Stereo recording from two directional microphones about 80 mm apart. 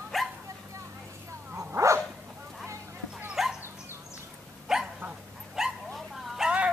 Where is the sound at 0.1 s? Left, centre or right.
Centre.